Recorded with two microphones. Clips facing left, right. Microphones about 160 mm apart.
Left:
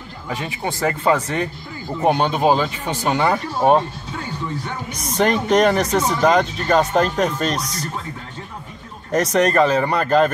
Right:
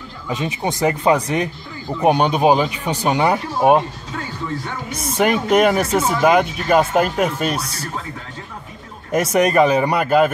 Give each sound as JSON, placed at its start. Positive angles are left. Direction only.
{"t": 0.3, "sound": "speech", "side_deg": -20}
{"t": 4.9, "sound": "speech", "side_deg": -5}
{"t": 9.1, "sound": "speech", "side_deg": -10}